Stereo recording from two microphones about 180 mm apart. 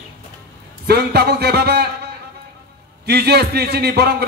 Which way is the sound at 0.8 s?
60° right (ahead or behind).